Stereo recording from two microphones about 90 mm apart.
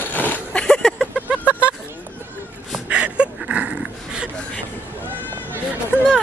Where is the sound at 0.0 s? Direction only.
20° left (ahead or behind).